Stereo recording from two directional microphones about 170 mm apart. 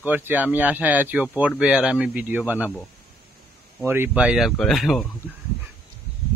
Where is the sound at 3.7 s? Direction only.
15° right (ahead or behind).